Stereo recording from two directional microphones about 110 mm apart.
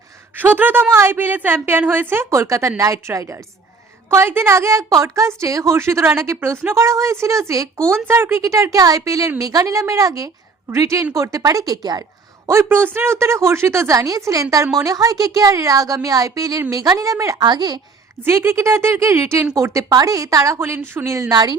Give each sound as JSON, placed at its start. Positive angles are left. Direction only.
{"t": 0.3, "sound": "a woman's voice", "side_deg": -15}
{"t": 12.5, "sound": "a woman's voice", "side_deg": -25}
{"t": 18.2, "sound": "a woman's voice", "side_deg": -25}